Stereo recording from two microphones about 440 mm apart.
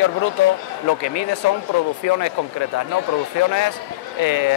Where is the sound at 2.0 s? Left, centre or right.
Left.